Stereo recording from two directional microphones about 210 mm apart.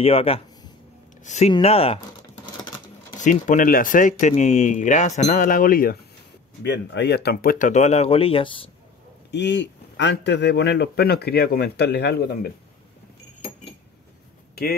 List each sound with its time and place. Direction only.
0.0 s speech: 25° left (ahead or behind)
3.2 s speech: 35° left (ahead or behind)
6.6 s speech: 55° left (ahead or behind); by 8.6 s 25° left (ahead or behind)
9.3 s a man's voice: 55° left (ahead or behind)
14.5 s a sound: 45° left (ahead or behind)